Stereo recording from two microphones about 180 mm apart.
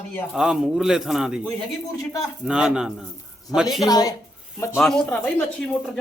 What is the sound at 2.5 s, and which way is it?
Speech, 5° right (ahead or behind).